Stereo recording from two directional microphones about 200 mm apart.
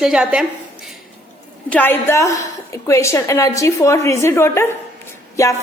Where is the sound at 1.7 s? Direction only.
10° left (ahead or behind).